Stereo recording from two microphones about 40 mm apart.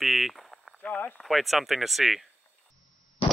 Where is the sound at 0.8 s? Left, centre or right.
Left.